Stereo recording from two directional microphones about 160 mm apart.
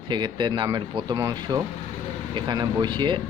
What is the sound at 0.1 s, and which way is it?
Speech, 30° right (ahead or behind).